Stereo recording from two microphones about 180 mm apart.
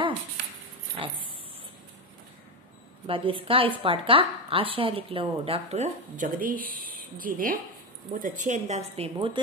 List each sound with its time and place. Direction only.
3.1 s a woman's voice: 30° right (ahead or behind)